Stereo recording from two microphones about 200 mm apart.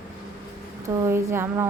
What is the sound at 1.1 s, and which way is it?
Speech, 10° right (ahead or behind).